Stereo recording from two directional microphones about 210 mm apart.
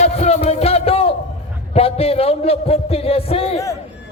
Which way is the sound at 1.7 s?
30° left (ahead or behind).